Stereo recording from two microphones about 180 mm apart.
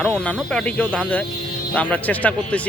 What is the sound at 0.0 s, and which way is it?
Speech, 5° left (ahead or behind).